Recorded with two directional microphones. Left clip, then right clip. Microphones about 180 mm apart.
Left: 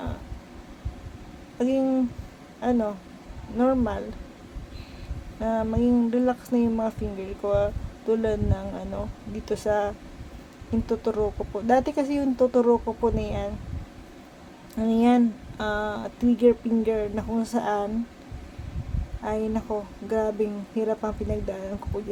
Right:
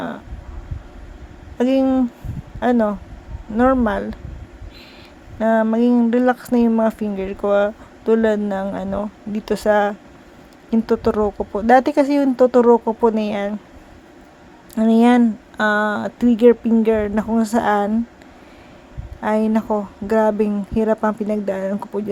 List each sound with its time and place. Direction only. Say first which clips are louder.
1.5 s speech: right 7 dB; 45° right (ahead or behind)
5.4 s speech: right 9 dB; 45° right (ahead or behind)
14.8 s speech: right 7 dB; 40° right (ahead or behind)
19.2 s speech: right 9 dB; 45° right (ahead or behind)